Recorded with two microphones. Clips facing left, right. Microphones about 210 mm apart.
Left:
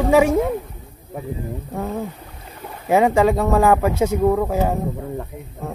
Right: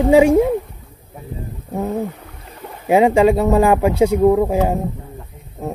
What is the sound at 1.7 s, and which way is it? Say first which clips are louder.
A man's voice: right 5 dB; 20° right (ahead or behind).